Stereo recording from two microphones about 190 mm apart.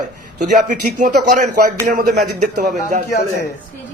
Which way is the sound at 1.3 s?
45° right (ahead or behind).